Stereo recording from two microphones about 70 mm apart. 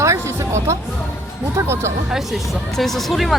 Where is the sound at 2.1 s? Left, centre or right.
Centre.